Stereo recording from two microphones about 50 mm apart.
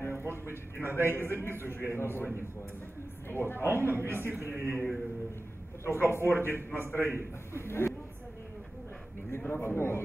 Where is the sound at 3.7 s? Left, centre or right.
Right.